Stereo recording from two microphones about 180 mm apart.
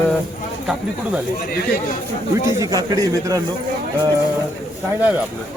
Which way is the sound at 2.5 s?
20° right (ahead or behind).